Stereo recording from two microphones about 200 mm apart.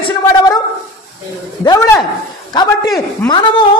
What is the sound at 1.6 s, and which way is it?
A man's voice, 15° left (ahead or behind).